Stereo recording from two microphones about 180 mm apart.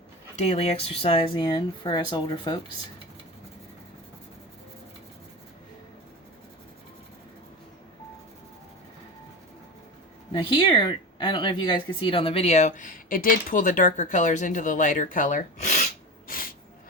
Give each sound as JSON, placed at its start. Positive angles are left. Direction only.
{"t": 0.3, "sound": "speech", "side_deg": 35}
{"t": 10.3, "sound": "speech", "side_deg": 25}